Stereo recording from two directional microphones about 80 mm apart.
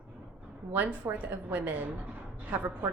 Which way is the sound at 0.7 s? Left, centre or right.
Right.